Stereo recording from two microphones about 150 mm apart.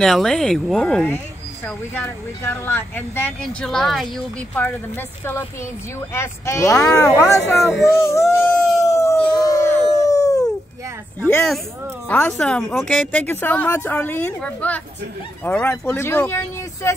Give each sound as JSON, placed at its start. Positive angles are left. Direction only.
{"t": 0.0, "sound": "speech", "side_deg": 0}
{"t": 7.8, "sound": "howl", "side_deg": 20}
{"t": 11.1, "sound": "speech", "side_deg": 15}